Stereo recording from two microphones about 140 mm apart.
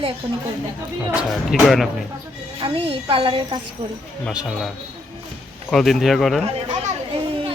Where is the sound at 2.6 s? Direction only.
40° right (ahead or behind).